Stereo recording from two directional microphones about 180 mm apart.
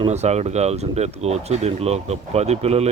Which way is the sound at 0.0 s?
40° right (ahead or behind).